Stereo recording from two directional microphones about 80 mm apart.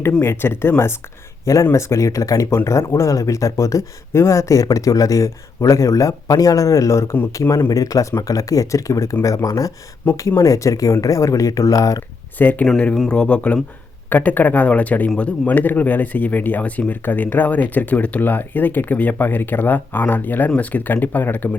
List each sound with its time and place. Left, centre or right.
0.2 s speech: left
12.4 s speech: left
12.6 s speech: centre; by 21.6 s left